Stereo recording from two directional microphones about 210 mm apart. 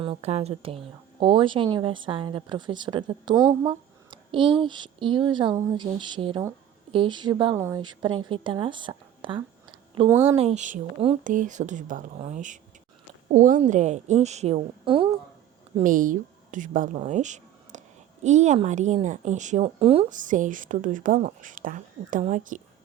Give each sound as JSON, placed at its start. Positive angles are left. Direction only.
{"t": 0.0, "sound": "a woman's voice", "side_deg": -30}
{"t": 10.1, "sound": "speech", "side_deg": -10}
{"t": 10.3, "sound": "speech", "side_deg": -30}
{"t": 15.7, "sound": "a woman's voice", "side_deg": -40}